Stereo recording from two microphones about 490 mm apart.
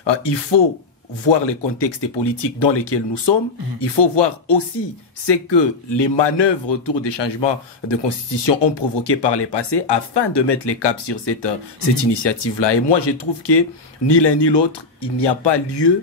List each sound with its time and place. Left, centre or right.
0.0 s speech: left